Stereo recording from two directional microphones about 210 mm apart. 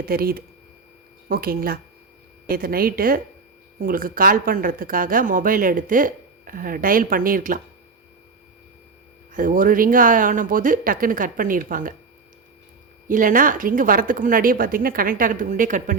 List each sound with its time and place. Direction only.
0.0 s a woman's voice: 45° right (ahead or behind)
9.3 s speech: 40° right (ahead or behind)
13.1 s speech: 40° right (ahead or behind)